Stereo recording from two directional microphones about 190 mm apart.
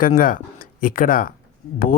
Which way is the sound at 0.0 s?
45° left (ahead or behind).